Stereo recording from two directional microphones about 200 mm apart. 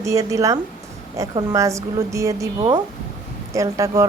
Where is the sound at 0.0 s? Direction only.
15° right (ahead or behind).